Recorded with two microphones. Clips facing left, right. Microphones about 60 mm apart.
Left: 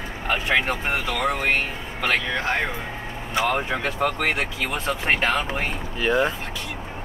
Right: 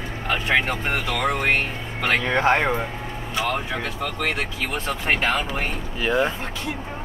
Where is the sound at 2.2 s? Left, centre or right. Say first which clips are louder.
Right 5 dB; right.